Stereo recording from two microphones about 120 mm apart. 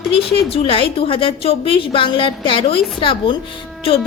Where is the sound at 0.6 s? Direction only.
50° left (ahead or behind).